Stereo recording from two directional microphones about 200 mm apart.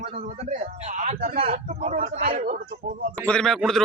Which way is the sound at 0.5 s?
35° right (ahead or behind).